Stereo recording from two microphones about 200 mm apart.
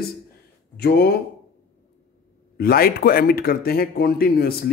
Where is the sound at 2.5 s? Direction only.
50° left (ahead or behind).